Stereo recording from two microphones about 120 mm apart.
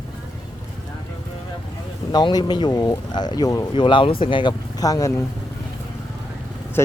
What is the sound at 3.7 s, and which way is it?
Speech, 45° left (ahead or behind).